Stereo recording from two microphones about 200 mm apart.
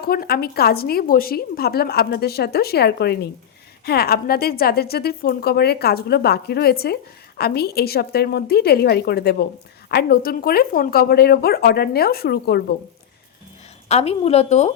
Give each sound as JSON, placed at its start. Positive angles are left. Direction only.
{"t": 0.0, "sound": "a woman's voice", "side_deg": 45}
{"t": 13.8, "sound": "a woman's voice", "side_deg": 30}